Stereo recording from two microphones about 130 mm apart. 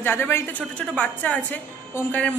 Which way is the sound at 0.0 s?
15° left (ahead or behind).